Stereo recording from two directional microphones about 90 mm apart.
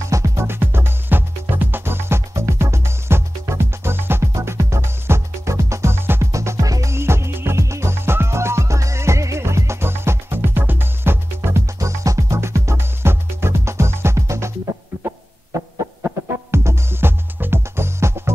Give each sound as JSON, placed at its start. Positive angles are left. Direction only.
{"t": 0.0, "sound": "music", "side_deg": -35}